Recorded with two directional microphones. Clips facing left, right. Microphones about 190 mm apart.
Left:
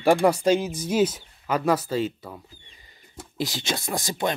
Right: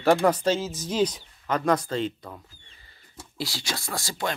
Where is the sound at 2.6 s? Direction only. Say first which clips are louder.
Left 3 dB; 15° left (ahead or behind).